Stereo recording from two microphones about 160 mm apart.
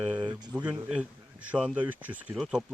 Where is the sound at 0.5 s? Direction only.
5° right (ahead or behind).